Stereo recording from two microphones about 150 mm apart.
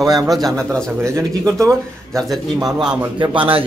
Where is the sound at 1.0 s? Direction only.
20° right (ahead or behind).